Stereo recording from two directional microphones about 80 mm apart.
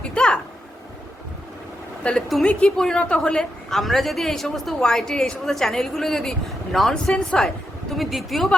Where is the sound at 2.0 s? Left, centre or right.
Centre.